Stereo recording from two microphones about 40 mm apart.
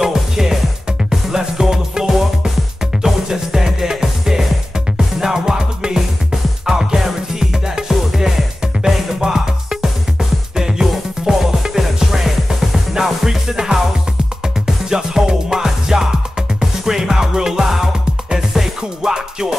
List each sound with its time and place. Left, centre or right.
0.0 s music: centre
8.4 s music: centre
14.9 s music: centre